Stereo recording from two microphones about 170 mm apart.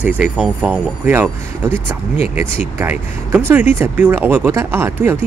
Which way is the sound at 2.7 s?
15° right (ahead or behind).